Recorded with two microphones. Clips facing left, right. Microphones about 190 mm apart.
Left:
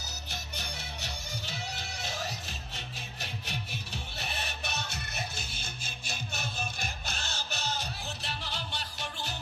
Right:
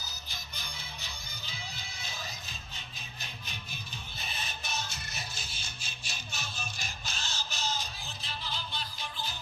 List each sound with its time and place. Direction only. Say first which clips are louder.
0.1 s music: left 5 dB; 70° left (ahead or behind)